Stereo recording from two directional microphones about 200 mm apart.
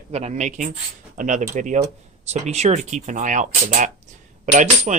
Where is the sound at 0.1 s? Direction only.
35° right (ahead or behind).